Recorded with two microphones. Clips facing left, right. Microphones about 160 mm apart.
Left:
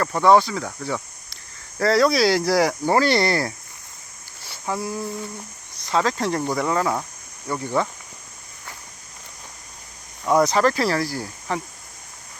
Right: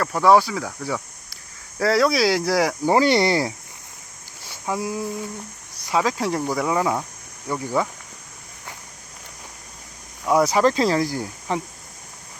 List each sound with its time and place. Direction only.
0.0 s speech: 5° right (ahead or behind)
0.9 s cricket: 5° right (ahead or behind)
1.8 s speech: 5° right (ahead or behind)
2.8 s speech: 15° right (ahead or behind)
4.4 s a sound: 15° right (ahead or behind)
5.8 s speech: 10° right (ahead or behind)
10.2 s speech: 5° right (ahead or behind)